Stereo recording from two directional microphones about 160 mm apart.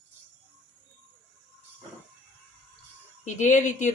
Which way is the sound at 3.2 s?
50° left (ahead or behind).